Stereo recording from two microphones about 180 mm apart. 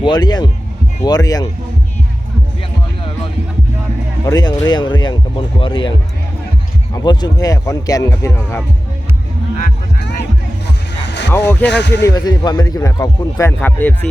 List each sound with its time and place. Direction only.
0.0 s speech: 25° left (ahead or behind)
4.3 s speech: 20° left (ahead or behind)
6.9 s speech: 25° left (ahead or behind)
11.0 s a sound: 75° left (ahead or behind)
11.3 s a man's voice: 10° left (ahead or behind)
11.6 s speech: 70° left (ahead or behind)
12.0 s a man's voice: 20° left (ahead or behind)